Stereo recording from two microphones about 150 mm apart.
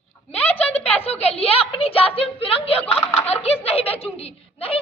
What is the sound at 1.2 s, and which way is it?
A woman's voice, 45° left (ahead or behind).